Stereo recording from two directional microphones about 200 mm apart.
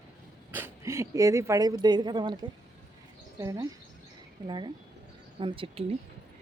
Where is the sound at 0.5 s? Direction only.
15° right (ahead or behind).